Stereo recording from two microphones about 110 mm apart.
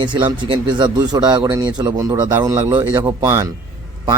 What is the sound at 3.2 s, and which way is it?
Speech, 25° right (ahead or behind).